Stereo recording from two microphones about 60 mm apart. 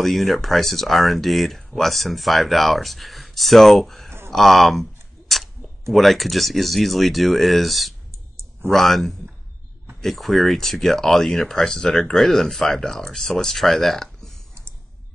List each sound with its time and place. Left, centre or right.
0.0 s speech: centre